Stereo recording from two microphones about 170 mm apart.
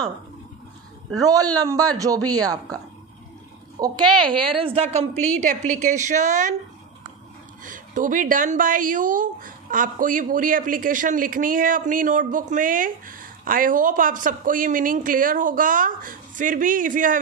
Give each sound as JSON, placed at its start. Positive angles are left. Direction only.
{"t": 1.1, "sound": "speech", "side_deg": -20}
{"t": 3.8, "sound": "speech", "side_deg": -25}
{"t": 5.4, "sound": "a woman's voice", "side_deg": -45}
{"t": 7.6, "sound": "a woman's voice", "side_deg": -50}